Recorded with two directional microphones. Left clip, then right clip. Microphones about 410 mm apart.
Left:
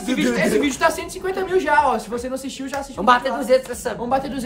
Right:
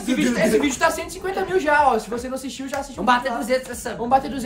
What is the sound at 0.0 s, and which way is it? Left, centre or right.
Speech, centre.